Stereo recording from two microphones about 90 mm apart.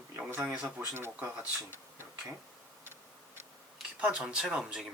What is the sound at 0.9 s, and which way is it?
Speech, 25° right (ahead or behind).